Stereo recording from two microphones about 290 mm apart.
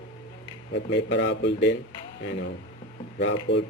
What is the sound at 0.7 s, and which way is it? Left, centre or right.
A man's voice, left.